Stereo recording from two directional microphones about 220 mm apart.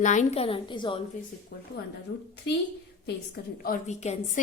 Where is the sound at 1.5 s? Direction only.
45° left (ahead or behind).